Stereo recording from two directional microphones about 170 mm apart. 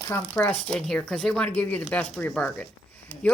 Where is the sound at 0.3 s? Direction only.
10° left (ahead or behind).